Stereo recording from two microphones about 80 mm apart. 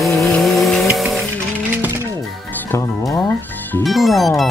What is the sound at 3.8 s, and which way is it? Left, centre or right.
Speech, centre.